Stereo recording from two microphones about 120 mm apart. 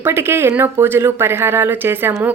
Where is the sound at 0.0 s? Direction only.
20° right (ahead or behind).